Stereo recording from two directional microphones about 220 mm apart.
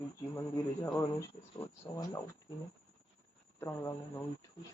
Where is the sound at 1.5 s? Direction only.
15° left (ahead or behind).